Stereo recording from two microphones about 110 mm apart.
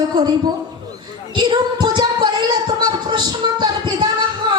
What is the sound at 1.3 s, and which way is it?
Singing, 45° right (ahead or behind).